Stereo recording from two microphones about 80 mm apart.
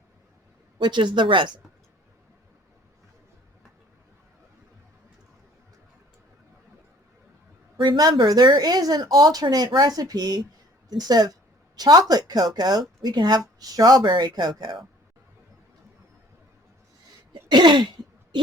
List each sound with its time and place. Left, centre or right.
0.8 s speech: right
7.8 s speech: right
14.0 s speech: right
17.5 s throat clearing: right